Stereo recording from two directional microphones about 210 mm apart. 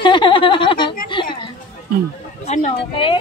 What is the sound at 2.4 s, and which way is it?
Speech, 30° left (ahead or behind).